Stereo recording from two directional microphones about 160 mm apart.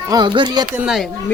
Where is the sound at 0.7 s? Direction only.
5° right (ahead or behind).